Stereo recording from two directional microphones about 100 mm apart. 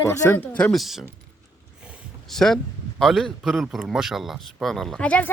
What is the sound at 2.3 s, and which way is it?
A man's voice, 5° left (ahead or behind).